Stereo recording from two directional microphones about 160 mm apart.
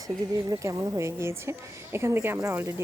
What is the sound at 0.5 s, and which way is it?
A woman's voice, 20° right (ahead or behind).